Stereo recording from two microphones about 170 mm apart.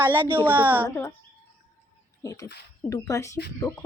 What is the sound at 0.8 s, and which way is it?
Speech, 15° left (ahead or behind).